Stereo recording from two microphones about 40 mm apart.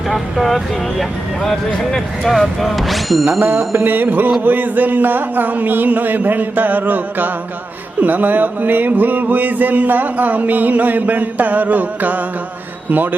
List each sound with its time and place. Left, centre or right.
0.1 s speech: centre
3.4 s mantra: right
4.4 s music: right